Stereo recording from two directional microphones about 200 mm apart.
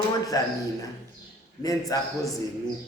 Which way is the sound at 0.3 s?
15° left (ahead or behind).